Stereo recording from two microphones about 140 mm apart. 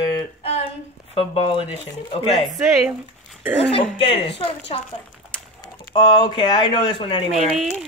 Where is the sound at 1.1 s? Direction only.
40° left (ahead or behind).